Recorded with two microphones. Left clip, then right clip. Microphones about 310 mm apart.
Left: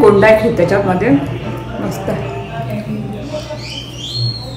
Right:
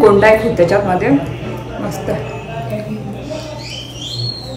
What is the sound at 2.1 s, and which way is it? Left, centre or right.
Speech, centre.